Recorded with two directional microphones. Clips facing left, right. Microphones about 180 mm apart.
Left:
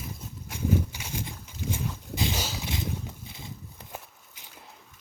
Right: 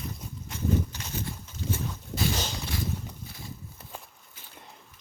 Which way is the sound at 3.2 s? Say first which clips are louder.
Even; 20° left (ahead or behind).